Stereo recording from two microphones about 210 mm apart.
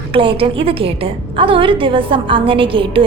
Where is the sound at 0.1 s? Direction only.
25° right (ahead or behind).